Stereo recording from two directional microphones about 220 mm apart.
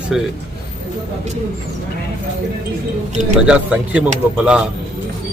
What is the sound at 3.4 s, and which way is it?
Speech, 5° right (ahead or behind).